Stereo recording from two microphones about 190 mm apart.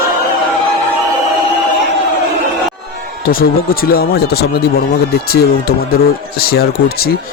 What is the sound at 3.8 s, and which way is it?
Speech, 55° left (ahead or behind).